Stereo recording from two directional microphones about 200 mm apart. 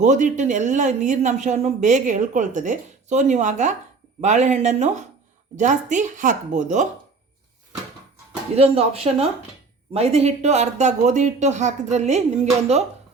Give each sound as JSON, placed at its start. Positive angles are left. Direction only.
{"t": 0.0, "sound": "speech", "side_deg": -35}
{"t": 8.5, "sound": "speech", "side_deg": -30}